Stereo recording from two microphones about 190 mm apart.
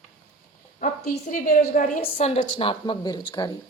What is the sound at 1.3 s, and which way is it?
A woman's voice, 45° left (ahead or behind).